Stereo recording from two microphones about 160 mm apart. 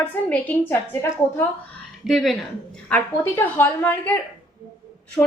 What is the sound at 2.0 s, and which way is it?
A woman's voice, centre (ahead or behind).